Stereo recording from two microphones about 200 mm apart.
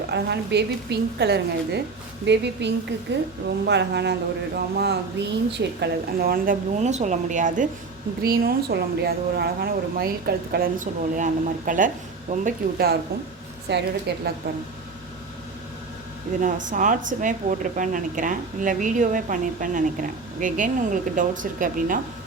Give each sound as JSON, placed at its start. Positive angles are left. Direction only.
{"t": 0.1, "sound": "a woman's voice", "side_deg": -55}
{"t": 16.4, "sound": "a woman's voice", "side_deg": -40}